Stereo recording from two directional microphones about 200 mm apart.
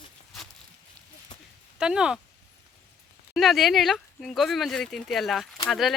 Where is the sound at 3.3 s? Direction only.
Centre (ahead or behind).